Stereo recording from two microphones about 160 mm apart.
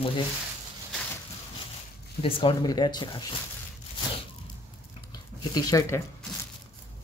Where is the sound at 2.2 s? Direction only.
35° left (ahead or behind).